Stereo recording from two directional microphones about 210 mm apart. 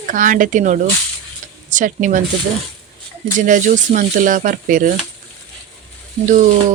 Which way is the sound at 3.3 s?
40° right (ahead or behind).